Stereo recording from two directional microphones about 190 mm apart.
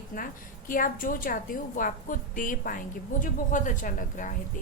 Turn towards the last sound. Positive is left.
turn(degrees=45)  # may be behind; listen again after turning